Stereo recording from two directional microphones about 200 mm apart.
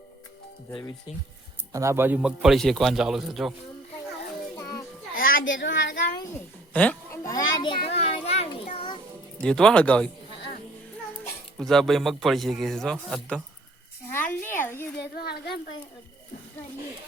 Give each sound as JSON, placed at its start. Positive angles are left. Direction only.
{"t": 1.7, "sound": "a man's voice", "side_deg": -15}
{"t": 5.1, "sound": "children playing", "side_deg": 45}
{"t": 5.5, "sound": "speech", "side_deg": 65}
{"t": 6.7, "sound": "a child's voice", "side_deg": 10}
{"t": 7.9, "sound": "children playing", "side_deg": 30}
{"t": 9.4, "sound": "a man's voice", "side_deg": 5}
{"t": 11.5, "sound": "a man's voice", "side_deg": 0}
{"t": 14.1, "sound": "a sound", "side_deg": 10}
{"t": 15.1, "sound": "a child's voice", "side_deg": 50}